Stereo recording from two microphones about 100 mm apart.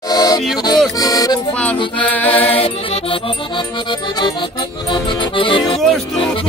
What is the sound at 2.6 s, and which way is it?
Accordion, 70° left (ahead or behind).